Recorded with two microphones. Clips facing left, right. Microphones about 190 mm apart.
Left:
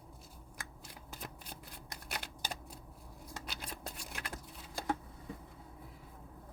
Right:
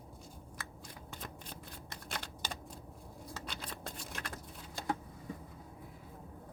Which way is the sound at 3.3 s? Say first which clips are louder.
Right 1 dB; 5° left (ahead or behind).